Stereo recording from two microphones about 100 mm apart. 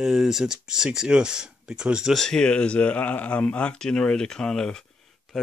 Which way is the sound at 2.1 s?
5° left (ahead or behind).